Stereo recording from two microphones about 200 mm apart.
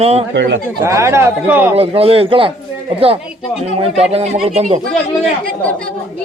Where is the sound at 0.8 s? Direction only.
15° right (ahead or behind).